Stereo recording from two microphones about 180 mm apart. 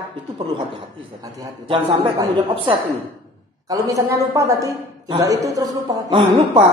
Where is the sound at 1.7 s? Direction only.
30° right (ahead or behind).